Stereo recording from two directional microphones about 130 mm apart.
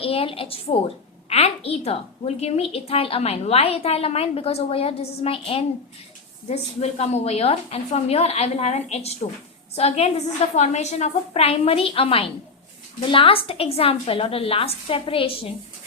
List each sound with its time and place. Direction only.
0.0 s a woman's voice: 45° left (ahead or behind)